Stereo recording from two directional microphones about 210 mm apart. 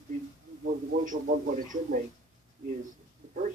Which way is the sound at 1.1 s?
40° right (ahead or behind).